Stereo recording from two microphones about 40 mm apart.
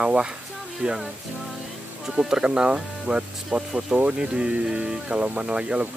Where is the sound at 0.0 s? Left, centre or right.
Right.